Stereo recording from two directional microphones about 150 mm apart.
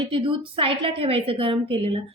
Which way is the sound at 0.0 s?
35° right (ahead or behind).